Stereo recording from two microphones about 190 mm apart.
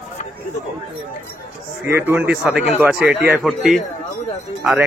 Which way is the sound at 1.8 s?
15° right (ahead or behind).